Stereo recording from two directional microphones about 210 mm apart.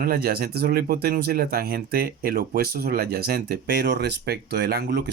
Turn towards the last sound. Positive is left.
turn(degrees=-55)  # may be behind; listen again after turning